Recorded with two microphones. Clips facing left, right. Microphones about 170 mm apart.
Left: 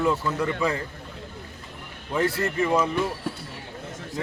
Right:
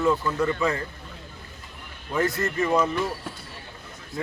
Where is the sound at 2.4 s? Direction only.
10° left (ahead or behind).